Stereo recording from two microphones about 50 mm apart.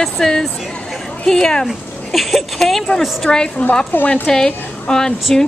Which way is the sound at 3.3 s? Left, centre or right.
Left.